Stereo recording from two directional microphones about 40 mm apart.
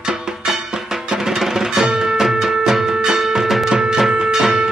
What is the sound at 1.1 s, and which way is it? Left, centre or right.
Music, centre.